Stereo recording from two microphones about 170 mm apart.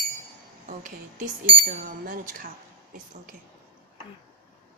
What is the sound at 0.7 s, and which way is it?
Speech, 50° right (ahead or behind).